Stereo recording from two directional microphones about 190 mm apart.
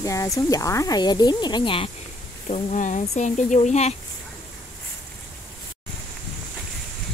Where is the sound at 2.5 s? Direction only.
40° left (ahead or behind).